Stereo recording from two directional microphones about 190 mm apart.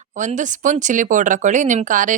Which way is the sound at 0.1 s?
40° right (ahead or behind).